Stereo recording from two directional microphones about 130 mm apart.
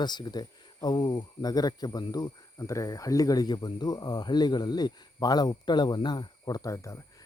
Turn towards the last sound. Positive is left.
turn(degrees=25)  # may be behind; listen again after turning